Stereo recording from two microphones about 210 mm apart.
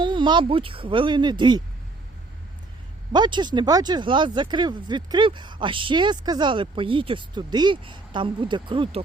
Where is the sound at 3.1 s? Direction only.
20° right (ahead or behind).